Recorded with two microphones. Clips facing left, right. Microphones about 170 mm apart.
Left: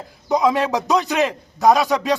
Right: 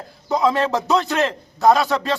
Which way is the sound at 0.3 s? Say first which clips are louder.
Left 1 dB; 15° left (ahead or behind).